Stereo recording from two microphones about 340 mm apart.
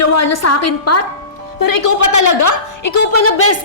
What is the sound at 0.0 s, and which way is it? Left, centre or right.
A woman's voice, left.